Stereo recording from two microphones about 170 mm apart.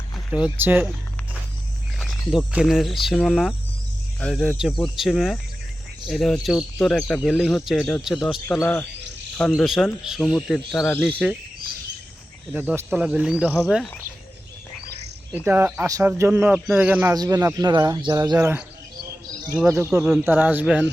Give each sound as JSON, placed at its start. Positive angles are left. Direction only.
{"t": 0.3, "sound": "speech", "side_deg": -5}
{"t": 2.0, "sound": "a sound", "side_deg": 0}
{"t": 2.5, "sound": "speech", "side_deg": -5}
{"t": 8.6, "sound": "speech", "side_deg": 10}
{"t": 9.4, "sound": "speech", "side_deg": 0}
{"t": 12.5, "sound": "speech", "side_deg": -10}
{"t": 15.4, "sound": "speech", "side_deg": -15}
{"t": 19.6, "sound": "speech", "side_deg": -15}
{"t": 19.9, "sound": "speech", "side_deg": -5}